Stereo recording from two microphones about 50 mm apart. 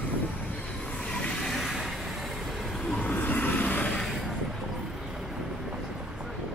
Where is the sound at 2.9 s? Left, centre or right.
Left.